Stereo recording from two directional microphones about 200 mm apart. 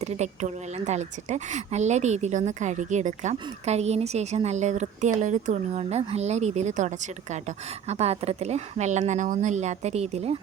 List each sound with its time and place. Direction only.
0.0 s a woman's voice: 35° right (ahead or behind)